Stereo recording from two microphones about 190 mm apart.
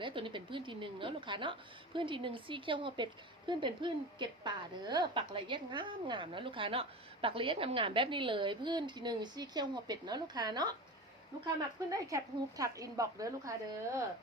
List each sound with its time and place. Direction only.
0.0 s a woman's voice: 25° right (ahead or behind)